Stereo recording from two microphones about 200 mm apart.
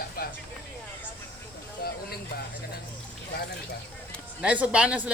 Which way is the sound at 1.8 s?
50° left (ahead or behind).